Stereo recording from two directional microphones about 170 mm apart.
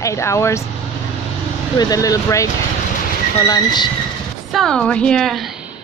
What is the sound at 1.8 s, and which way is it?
Speech, 20° left (ahead or behind).